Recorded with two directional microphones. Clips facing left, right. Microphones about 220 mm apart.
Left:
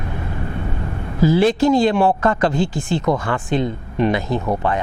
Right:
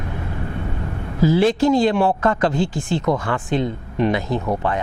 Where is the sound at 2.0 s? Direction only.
25° left (ahead or behind).